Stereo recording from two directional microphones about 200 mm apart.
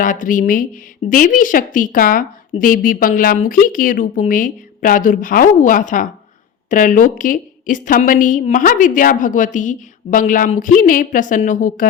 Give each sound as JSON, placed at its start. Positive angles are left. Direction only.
{"t": 0.0, "sound": "a woman's voice", "side_deg": 40}